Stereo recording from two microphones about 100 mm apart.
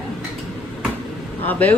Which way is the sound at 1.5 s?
15° left (ahead or behind).